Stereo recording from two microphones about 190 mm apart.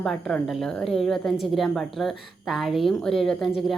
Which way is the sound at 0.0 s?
5° left (ahead or behind).